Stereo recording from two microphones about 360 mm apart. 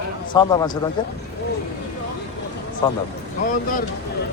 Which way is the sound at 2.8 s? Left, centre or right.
Centre.